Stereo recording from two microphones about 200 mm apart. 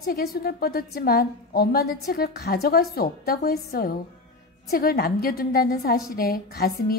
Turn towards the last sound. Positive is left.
turn(degrees=45)  # may be behind; listen again after turning